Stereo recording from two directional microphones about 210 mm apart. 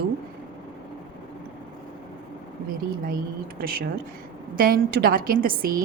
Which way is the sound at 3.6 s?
45° right (ahead or behind).